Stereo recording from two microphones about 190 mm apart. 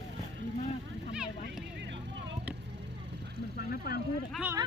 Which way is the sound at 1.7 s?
65° right (ahead or behind).